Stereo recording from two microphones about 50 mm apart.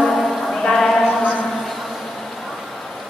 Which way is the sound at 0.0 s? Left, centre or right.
Centre.